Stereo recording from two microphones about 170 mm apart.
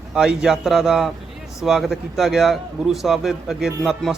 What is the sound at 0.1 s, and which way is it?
Speech, 5° right (ahead or behind).